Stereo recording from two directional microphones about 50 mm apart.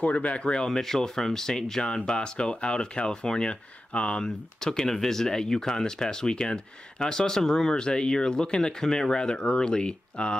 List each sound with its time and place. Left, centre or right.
0.0 s speech: left
0.7 s speech: centre